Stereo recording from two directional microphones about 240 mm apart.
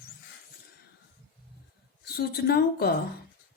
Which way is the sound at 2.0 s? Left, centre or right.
Left.